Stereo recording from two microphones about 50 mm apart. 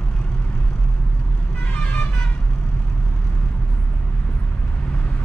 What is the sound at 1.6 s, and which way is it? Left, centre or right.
Vehicle, left.